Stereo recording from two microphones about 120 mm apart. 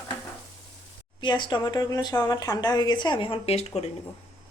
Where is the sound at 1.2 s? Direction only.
40° left (ahead or behind); by 3.9 s 60° left (ahead or behind).